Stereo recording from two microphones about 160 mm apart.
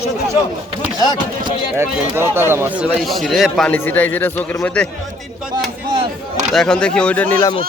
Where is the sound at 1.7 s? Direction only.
15° right (ahead or behind); by 4.9 s 10° left (ahead or behind).